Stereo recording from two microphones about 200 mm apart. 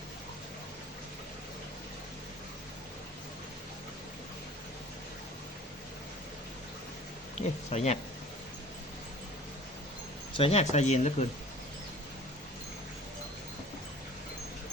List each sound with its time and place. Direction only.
7.3 s speech: 30° left (ahead or behind)
10.3 s speech: 30° left (ahead or behind)